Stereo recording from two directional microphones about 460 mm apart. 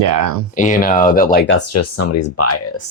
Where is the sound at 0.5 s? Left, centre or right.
Centre.